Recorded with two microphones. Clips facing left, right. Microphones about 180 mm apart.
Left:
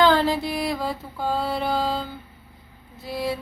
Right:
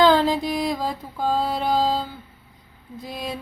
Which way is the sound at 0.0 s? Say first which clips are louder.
Right 2 dB; 15° right (ahead or behind).